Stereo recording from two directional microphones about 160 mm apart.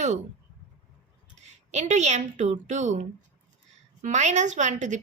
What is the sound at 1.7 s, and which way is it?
A woman's voice, 50° right (ahead or behind).